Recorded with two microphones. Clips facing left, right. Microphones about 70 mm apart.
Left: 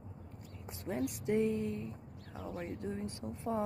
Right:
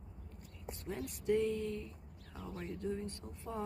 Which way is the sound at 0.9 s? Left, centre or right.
Left.